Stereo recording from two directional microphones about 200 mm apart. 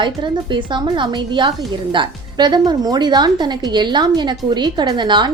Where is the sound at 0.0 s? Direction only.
25° right (ahead or behind).